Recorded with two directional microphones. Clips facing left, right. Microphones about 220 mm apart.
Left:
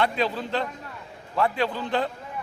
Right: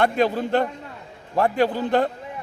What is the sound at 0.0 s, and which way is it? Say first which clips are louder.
A man's voice: right 5 dB; 50° right (ahead or behind).